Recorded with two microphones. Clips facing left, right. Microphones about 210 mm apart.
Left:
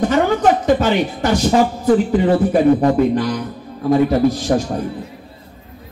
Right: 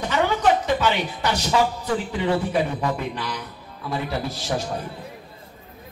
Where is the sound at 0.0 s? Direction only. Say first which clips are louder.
Left 7 dB; 45° left (ahead or behind).